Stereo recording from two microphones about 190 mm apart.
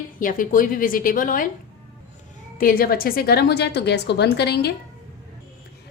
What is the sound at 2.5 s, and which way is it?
A woman's voice, 50° left (ahead or behind).